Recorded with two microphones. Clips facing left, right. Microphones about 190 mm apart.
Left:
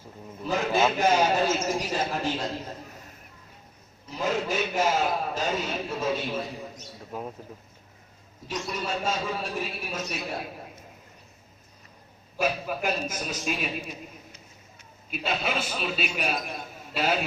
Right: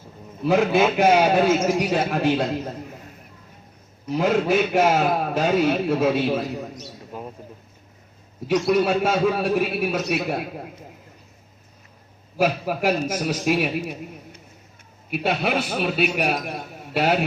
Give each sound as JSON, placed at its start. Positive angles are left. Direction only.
{"t": 0.4, "sound": "a man's voice", "side_deg": -65}
{"t": 4.1, "sound": "a man's voice", "side_deg": -65}
{"t": 8.4, "sound": "a man's voice", "side_deg": -65}
{"t": 12.4, "sound": "a man's voice", "side_deg": -70}
{"t": 15.1, "sound": "a man's voice", "side_deg": -65}